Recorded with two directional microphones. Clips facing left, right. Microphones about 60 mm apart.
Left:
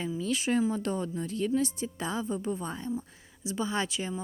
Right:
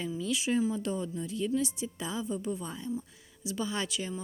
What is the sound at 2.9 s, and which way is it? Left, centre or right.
A woman's voice, left.